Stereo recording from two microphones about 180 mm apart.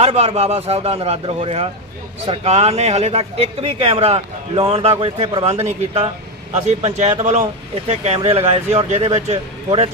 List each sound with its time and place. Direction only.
0.0 s speech: 35° right (ahead or behind)